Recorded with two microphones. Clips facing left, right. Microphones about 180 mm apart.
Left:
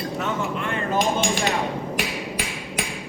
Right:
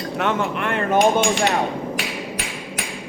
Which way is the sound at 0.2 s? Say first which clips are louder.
Right 7 dB; 70° right (ahead or behind).